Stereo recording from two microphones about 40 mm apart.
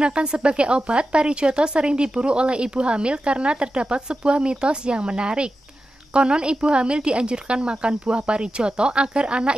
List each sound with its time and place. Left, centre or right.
0.0 s speech: right